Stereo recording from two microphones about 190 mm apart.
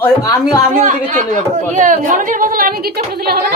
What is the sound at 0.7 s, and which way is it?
Speech, 40° right (ahead or behind).